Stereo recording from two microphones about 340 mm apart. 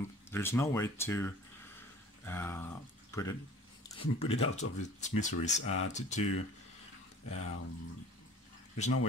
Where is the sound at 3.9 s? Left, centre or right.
Centre.